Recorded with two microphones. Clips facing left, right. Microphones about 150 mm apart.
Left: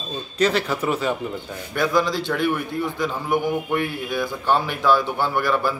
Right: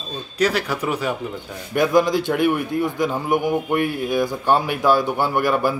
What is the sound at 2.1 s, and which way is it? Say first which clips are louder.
A man's voice: right 4 dB; 15° right (ahead or behind).